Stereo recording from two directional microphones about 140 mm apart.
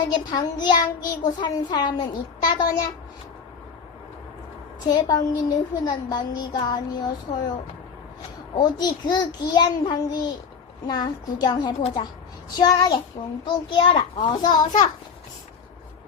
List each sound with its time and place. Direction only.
0.1 s a woman's voice: 30° left (ahead or behind)
4.8 s a woman's voice: 30° left (ahead or behind)
8.5 s a woman's voice: 30° left (ahead or behind)